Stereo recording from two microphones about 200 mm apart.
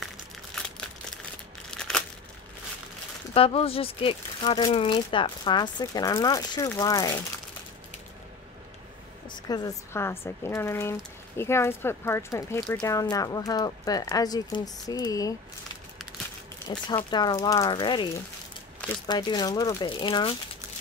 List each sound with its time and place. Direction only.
1.7 s crumpling: 5° left (ahead or behind)
3.3 s speech: 30° left (ahead or behind)
9.5 s speech: 15° left (ahead or behind)
16.8 s speech: 20° left (ahead or behind)
19.0 s speech: 20° left (ahead or behind)